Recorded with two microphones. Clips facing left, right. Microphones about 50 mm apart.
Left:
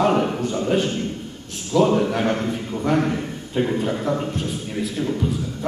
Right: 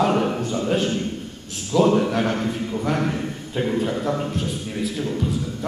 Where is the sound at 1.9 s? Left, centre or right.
Centre.